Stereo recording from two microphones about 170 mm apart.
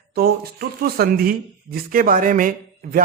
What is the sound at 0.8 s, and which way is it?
Speech, 60° right (ahead or behind).